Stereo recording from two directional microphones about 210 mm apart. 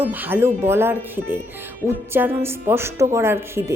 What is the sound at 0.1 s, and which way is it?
A woman's voice, 10° right (ahead or behind).